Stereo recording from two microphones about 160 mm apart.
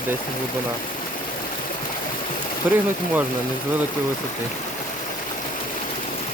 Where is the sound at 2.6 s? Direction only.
10° right (ahead or behind).